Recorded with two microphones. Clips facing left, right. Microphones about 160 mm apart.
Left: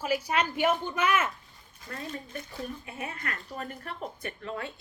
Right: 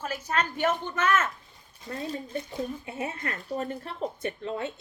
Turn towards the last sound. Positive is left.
turn(degrees=-25)  # may be behind; listen again after turning